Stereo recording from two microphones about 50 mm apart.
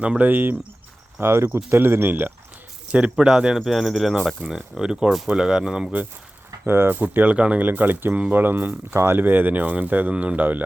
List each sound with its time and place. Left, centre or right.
0.2 s speech: right
1.2 s speech: right
2.9 s speech: centre
6.7 s speech: right
7.3 s speech: right
7.6 s speech: right